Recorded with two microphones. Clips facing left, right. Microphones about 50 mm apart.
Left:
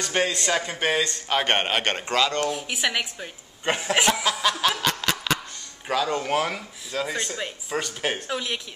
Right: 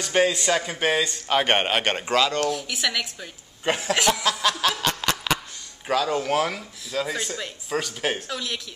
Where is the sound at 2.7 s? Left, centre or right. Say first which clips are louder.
Left 1 dB; centre.